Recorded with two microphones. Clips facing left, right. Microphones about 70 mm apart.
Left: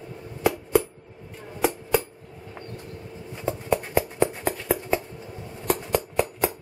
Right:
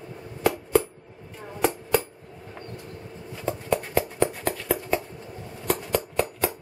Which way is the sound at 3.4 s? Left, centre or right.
Centre.